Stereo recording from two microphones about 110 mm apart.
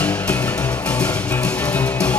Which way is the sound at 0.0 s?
15° left (ahead or behind).